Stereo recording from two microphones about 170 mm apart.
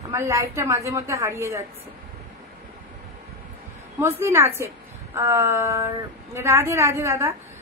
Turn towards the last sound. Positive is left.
turn(degrees=-15)  # may be behind; listen again after turning